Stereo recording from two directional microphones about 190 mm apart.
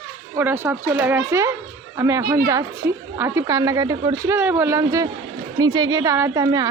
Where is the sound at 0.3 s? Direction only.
10° right (ahead or behind).